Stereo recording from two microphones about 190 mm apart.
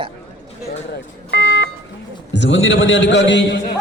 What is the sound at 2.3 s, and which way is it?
A man's voice, 70° left (ahead or behind).